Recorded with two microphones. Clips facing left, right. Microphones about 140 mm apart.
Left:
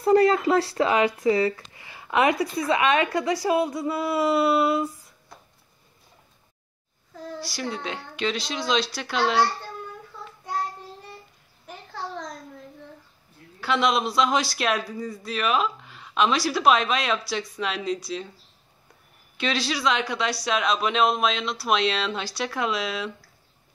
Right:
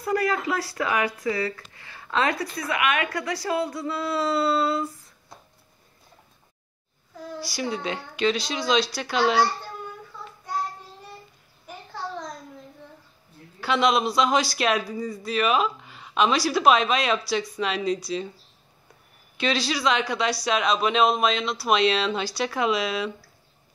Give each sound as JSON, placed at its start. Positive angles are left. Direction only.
{"t": 0.0, "sound": "speech", "side_deg": 30}
{"t": 7.3, "sound": "a man's voice", "side_deg": -5}
{"t": 13.6, "sound": "a man's voice", "side_deg": 0}
{"t": 19.3, "sound": "a man's voice", "side_deg": 0}